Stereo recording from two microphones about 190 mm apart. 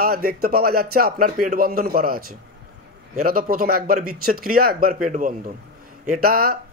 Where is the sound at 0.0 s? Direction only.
50° right (ahead or behind).